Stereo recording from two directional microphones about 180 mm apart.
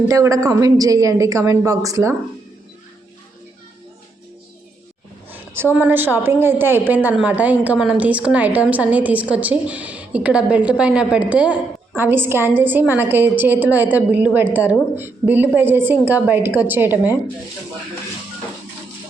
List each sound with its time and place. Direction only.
0.1 s a woman's voice: 15° right (ahead or behind)
5.7 s a woman's voice: 10° right (ahead or behind)